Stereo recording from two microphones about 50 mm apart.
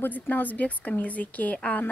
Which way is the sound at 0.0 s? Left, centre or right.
Left.